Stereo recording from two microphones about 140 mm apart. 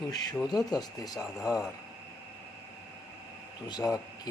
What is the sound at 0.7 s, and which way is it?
Speech, 30° left (ahead or behind).